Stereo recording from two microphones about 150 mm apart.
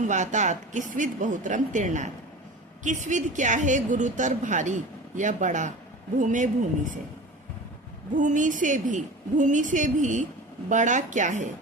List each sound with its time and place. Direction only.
0.0 s a woman's voice: 55° right (ahead or behind)
8.1 s a woman's voice: 55° right (ahead or behind)